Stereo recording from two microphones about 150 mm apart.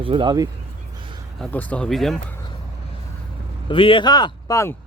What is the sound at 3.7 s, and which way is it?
Speech, 35° left (ahead or behind).